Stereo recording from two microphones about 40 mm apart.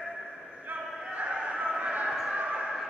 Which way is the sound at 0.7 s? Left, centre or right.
Right.